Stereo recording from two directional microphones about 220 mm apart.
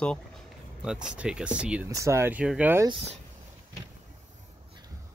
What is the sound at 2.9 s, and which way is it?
Speech, 30° right (ahead or behind).